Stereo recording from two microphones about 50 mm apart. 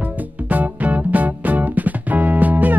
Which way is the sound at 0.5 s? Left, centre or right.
Right.